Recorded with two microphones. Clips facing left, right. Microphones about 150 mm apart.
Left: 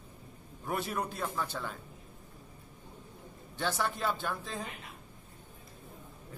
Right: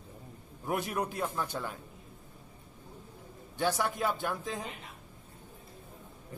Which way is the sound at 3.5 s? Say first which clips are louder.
Right 3 dB; 10° right (ahead or behind).